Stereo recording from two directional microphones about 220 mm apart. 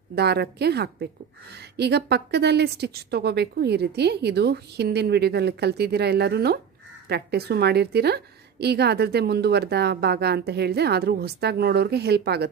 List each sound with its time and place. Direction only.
0.1 s a woman's voice: 50° right (ahead or behind)